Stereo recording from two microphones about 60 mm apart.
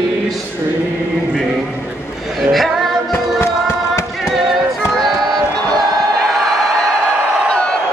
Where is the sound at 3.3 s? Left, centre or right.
Left.